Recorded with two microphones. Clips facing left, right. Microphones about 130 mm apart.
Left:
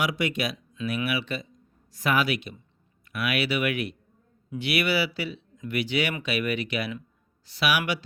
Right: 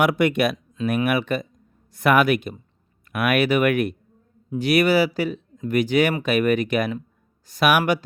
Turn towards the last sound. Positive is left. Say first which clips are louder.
# right 7 dB
turn(degrees=-50)  # may be behind; listen again after turning